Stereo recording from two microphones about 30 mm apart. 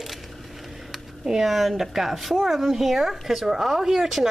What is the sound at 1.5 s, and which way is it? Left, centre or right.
Speech, centre.